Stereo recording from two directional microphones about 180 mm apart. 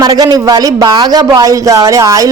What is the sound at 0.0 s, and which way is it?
A woman's voice, 20° right (ahead or behind).